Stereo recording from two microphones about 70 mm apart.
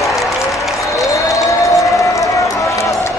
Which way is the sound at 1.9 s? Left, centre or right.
Left.